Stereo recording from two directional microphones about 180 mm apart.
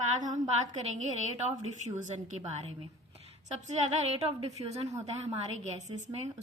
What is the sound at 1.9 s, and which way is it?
A woman's voice, 40° right (ahead or behind).